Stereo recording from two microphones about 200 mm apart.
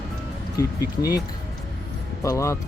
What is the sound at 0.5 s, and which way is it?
Speech, 15° left (ahead or behind).